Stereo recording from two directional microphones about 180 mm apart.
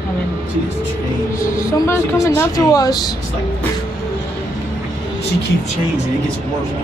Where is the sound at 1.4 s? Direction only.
15° left (ahead or behind).